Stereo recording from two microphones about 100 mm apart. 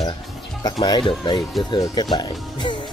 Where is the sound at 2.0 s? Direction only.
45° left (ahead or behind).